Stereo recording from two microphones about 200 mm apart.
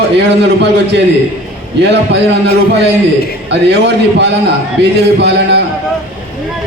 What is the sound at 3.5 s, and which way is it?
A man's voice, 55° right (ahead or behind).